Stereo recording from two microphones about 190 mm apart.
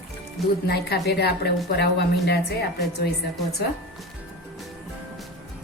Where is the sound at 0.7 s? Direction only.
60° left (ahead or behind).